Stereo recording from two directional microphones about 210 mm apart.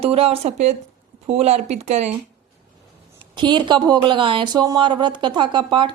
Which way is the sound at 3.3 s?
20° right (ahead or behind).